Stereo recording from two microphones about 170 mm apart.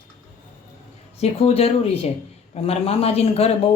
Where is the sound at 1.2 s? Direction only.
35° left (ahead or behind).